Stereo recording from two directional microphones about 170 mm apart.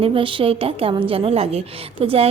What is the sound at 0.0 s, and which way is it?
A woman's voice, 30° right (ahead or behind).